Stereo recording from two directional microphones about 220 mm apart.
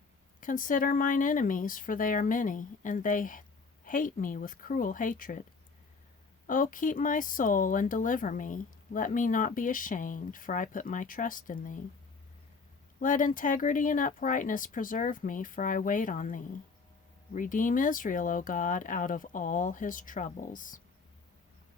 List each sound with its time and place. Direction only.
0.3 s speech: 35° left (ahead or behind)
6.5 s speech: 35° left (ahead or behind)
13.0 s speech: 35° left (ahead or behind)